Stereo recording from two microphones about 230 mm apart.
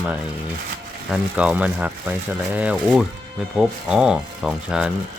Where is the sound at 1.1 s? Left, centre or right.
Centre.